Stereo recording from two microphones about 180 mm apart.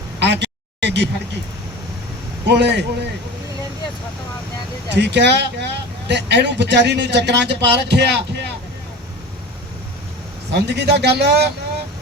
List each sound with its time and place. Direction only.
0.2 s a sound: 70° right (ahead or behind)
2.5 s speech: 70° right (ahead or behind)
4.9 s speech: 70° right (ahead or behind)
10.5 s speech: 65° right (ahead or behind)